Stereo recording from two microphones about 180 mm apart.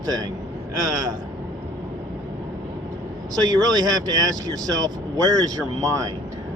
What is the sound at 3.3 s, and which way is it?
Speech, 20° right (ahead or behind).